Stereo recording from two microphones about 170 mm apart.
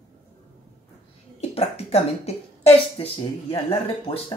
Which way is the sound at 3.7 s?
35° left (ahead or behind).